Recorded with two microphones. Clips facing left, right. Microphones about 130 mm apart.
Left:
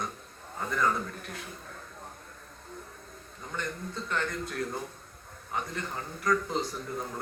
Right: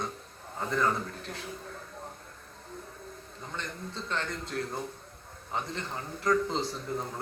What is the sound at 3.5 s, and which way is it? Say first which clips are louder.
A man's voice: left 3 dB; 25° right (ahead or behind).